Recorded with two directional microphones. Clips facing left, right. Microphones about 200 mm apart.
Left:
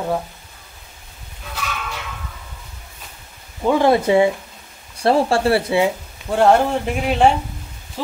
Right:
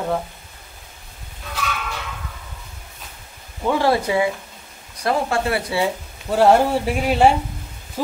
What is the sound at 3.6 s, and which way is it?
Speech, 20° left (ahead or behind).